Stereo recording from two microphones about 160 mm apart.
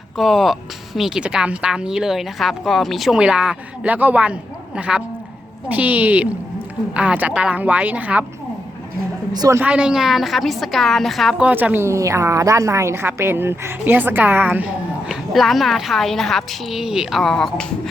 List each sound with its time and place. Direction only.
0.2 s a woman's voice: centre (ahead or behind)
9.3 s a woman's voice: 25° right (ahead or behind)
9.6 s a woman's voice: 5° right (ahead or behind)
15.1 s a woman's voice: centre (ahead or behind)